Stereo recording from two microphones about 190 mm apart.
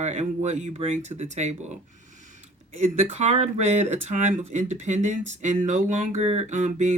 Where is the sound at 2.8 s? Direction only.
35° right (ahead or behind).